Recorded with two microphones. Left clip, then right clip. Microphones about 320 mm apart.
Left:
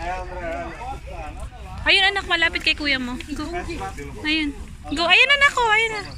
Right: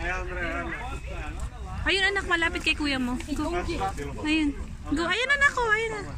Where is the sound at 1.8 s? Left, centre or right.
Centre.